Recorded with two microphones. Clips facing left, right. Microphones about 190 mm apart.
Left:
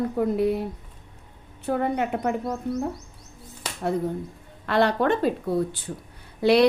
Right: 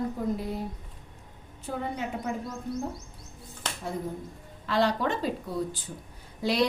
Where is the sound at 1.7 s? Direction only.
65° left (ahead or behind).